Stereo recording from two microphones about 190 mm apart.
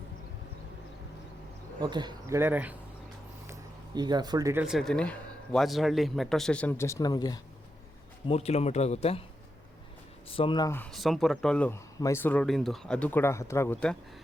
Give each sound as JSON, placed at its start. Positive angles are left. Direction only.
{"t": 1.8, "sound": "speech", "side_deg": -20}
{"t": 3.4, "sound": "a sound", "side_deg": -20}
{"t": 4.6, "sound": "a man's voice", "side_deg": 0}
{"t": 8.3, "sound": "speech", "side_deg": 35}
{"t": 10.2, "sound": "speech", "side_deg": 30}
{"t": 10.7, "sound": "a man's voice", "side_deg": 10}